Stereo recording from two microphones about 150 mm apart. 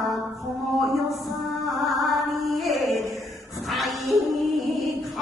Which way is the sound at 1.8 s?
Centre (ahead or behind).